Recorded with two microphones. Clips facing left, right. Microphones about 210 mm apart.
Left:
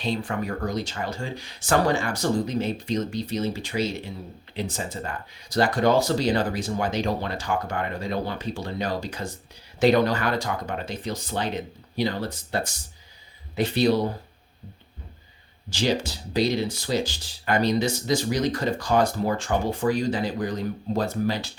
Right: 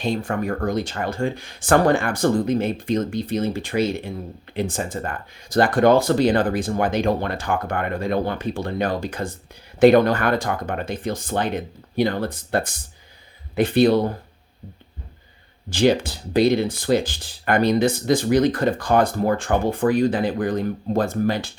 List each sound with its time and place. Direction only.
0.0 s speech: 45° right (ahead or behind)
15.7 s speech: 55° right (ahead or behind)